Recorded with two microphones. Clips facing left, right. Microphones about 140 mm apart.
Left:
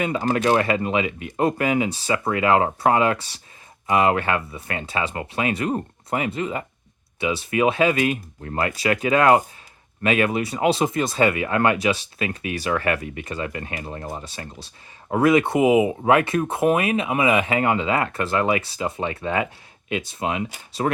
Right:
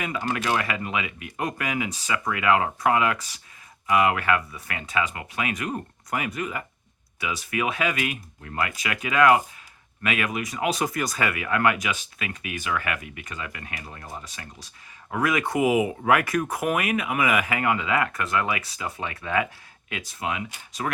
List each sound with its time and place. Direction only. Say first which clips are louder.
0.0 s speech: left 7 dB; 30° left (ahead or behind)